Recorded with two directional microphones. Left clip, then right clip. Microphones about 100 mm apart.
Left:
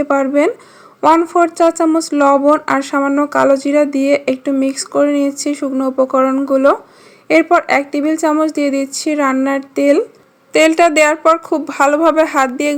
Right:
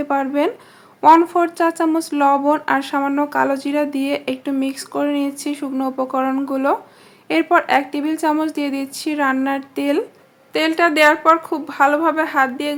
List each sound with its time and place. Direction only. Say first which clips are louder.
0.0 s a woman's voice: left 6 dB; 35° left (ahead or behind)
10.5 s a woman's voice: left 7 dB; 75° left (ahead or behind)